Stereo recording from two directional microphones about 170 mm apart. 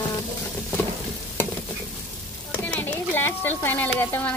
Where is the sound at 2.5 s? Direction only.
10° left (ahead or behind).